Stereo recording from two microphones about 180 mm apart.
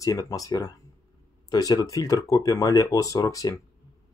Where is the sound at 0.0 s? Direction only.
20° left (ahead or behind).